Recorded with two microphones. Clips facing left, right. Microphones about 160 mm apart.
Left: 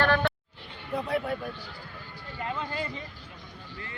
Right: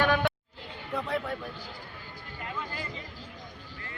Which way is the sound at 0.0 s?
10° right (ahead or behind).